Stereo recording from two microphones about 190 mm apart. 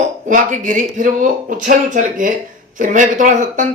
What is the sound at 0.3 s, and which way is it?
Speech, 45° right (ahead or behind).